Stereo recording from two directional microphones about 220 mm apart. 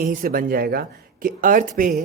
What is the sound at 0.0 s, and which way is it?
Speech, 40° right (ahead or behind).